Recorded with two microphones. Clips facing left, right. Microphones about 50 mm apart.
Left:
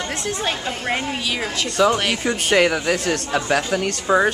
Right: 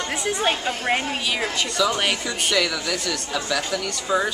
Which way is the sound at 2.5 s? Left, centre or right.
Left.